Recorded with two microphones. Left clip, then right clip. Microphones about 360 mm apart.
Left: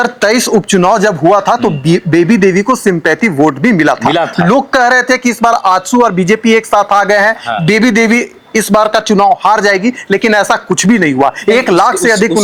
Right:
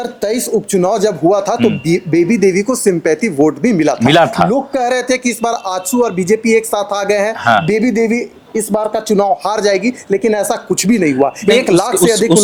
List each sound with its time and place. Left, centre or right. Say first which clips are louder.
0.0 s speech: left 8 dB; centre
4.0 s speech: right 1 dB; right
4.4 s speech: left 6 dB; centre